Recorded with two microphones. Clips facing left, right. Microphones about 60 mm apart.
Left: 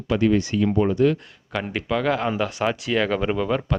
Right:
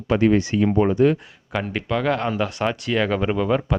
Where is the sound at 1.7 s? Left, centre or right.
Centre.